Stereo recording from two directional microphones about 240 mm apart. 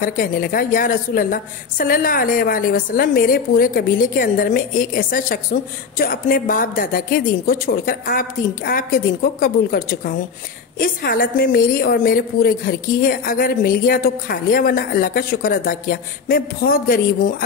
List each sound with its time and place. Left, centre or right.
0.0 s a woman's voice: left